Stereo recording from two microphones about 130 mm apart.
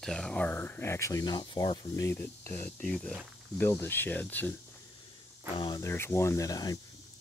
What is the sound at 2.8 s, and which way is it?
Speech, 5° left (ahead or behind).